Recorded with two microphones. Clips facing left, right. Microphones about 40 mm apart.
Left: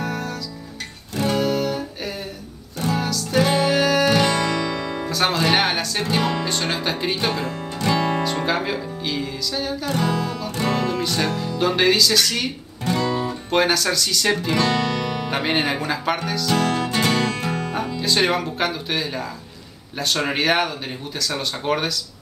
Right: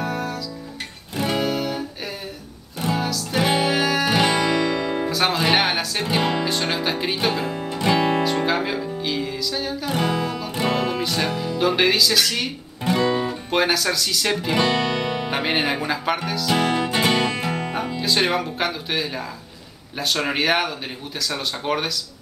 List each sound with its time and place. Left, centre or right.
0.0 s music: centre
5.1 s speech: centre
9.9 s music: centre
11.0 s speech: centre
12.9 s guitar: right
13.3 s speech: centre
16.5 s music: centre
17.7 s speech: centre